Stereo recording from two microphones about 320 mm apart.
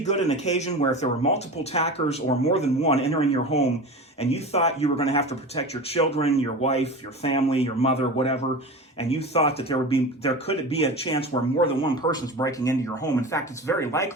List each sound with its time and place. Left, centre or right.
0.0 s speech: left